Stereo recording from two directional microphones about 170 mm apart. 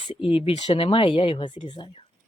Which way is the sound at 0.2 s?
30° left (ahead or behind).